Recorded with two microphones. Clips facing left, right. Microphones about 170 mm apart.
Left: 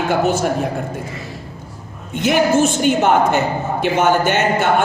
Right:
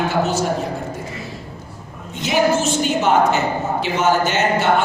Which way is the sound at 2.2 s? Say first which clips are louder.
Left 3 dB; 55° left (ahead or behind).